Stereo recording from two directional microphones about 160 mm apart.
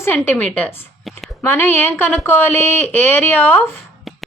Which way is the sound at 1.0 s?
Centre (ahead or behind).